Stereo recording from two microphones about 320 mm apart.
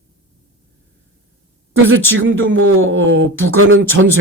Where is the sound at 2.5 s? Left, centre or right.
Right.